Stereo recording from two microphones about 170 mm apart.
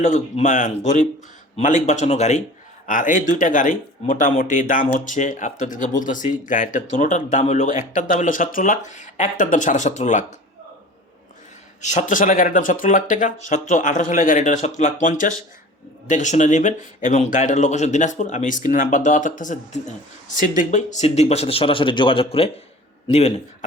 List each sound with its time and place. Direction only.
0.0 s speech: 45° left (ahead or behind)
11.8 s speech: 45° left (ahead or behind)